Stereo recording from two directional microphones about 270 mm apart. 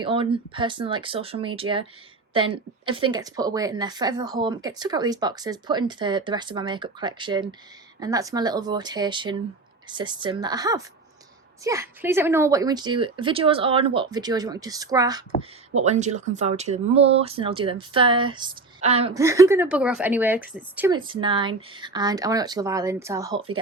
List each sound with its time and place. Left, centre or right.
0.0 s a woman's voice: centre
15.7 s speech: right
19.2 s a woman's voice: centre